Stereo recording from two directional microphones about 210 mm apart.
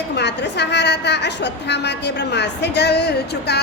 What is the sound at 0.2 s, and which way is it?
A woman's voice, 55° left (ahead or behind).